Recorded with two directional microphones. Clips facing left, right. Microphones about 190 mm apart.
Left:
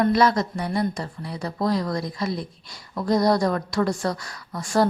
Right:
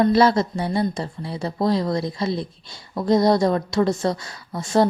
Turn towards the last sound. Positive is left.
turn(degrees=-25)  # may be behind; listen again after turning